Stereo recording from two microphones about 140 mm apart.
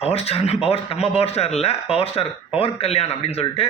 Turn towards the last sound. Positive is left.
turn(degrees=45)  # may be behind; listen again after turning